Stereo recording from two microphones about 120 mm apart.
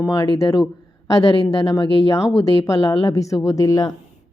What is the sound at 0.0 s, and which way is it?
A woman's voice, 25° left (ahead or behind).